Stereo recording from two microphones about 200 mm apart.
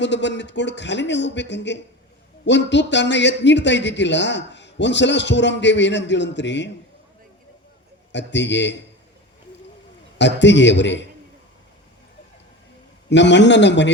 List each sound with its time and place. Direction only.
0.0 s a man's voice: 60° left (ahead or behind)
8.1 s a man's voice: 60° left (ahead or behind)
10.2 s a man's voice: 60° left (ahead or behind)
13.1 s a man's voice: 60° left (ahead or behind)